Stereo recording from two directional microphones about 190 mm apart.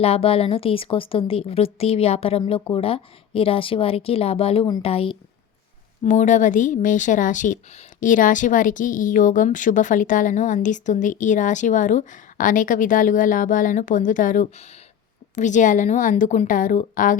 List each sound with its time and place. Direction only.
0.0 s a woman's voice: 30° left (ahead or behind)